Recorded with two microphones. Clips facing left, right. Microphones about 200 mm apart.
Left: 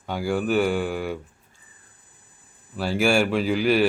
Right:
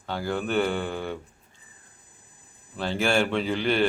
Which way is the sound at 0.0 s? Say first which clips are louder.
Left 4 dB; 10° left (ahead or behind).